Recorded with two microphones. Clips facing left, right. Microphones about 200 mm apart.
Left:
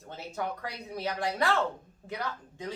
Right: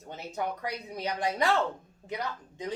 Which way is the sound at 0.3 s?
15° right (ahead or behind).